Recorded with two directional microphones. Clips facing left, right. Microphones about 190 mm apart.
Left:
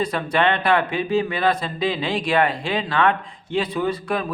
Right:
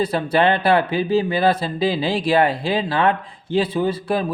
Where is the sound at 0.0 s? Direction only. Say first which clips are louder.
Right 3 dB; 30° right (ahead or behind).